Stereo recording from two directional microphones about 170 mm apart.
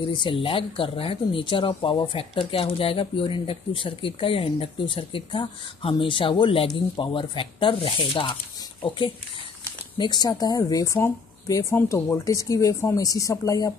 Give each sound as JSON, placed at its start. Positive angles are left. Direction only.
{"t": 0.1, "sound": "speech", "side_deg": 30}